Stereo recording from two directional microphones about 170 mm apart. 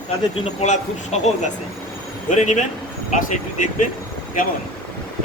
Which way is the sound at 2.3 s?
45° left (ahead or behind).